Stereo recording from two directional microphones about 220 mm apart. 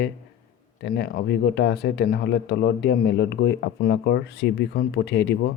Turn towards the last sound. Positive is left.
turn(degrees=50)  # may be behind; listen again after turning